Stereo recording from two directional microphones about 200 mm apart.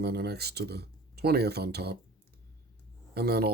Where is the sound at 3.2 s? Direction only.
50° right (ahead or behind).